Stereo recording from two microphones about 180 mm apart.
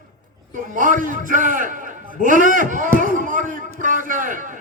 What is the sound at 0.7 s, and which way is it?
A man's voice, 45° right (ahead or behind).